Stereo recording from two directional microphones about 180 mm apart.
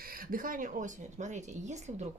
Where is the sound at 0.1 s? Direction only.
50° right (ahead or behind).